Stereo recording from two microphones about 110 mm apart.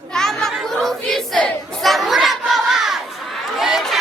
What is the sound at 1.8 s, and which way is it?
Crowd, centre (ahead or behind).